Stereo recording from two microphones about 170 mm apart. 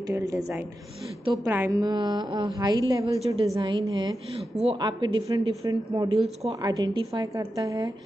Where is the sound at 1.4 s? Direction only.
15° right (ahead or behind).